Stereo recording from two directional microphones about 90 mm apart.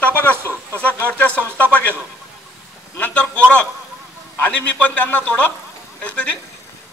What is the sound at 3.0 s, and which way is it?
A man's voice, 15° left (ahead or behind).